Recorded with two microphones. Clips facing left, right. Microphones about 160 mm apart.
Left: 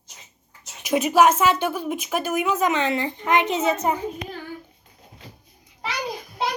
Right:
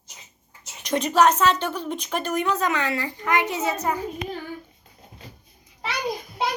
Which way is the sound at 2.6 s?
20° left (ahead or behind).